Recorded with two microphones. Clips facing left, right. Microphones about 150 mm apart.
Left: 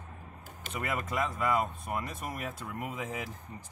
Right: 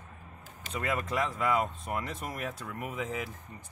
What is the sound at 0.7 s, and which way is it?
Speech, 20° left (ahead or behind).